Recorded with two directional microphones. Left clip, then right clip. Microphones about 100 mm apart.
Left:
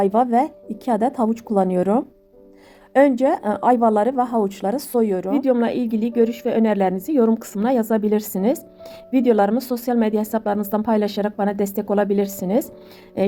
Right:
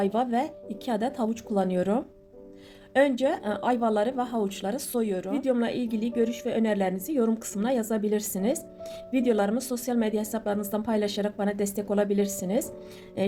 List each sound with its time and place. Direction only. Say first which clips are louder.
0.0 s a woman's voice: left 9 dB; 60° left (ahead or behind)
5.3 s a woman's voice: left 6 dB; 50° left (ahead or behind)
13.2 s music: left 8 dB; 60° left (ahead or behind)